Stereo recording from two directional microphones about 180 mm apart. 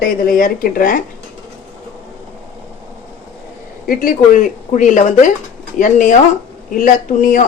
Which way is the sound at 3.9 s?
50° left (ahead or behind).